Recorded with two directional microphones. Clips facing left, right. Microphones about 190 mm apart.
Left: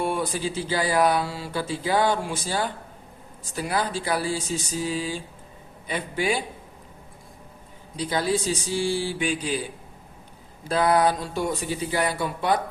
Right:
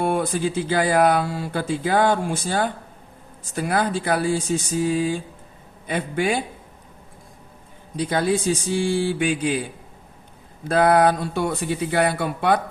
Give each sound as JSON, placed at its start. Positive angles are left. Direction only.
{"t": 0.0, "sound": "speech", "side_deg": -55}
{"t": 7.9, "sound": "speech", "side_deg": -55}
{"t": 10.7, "sound": "speech", "side_deg": -55}